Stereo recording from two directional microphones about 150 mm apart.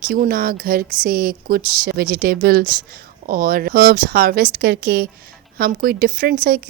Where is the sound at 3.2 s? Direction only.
70° right (ahead or behind).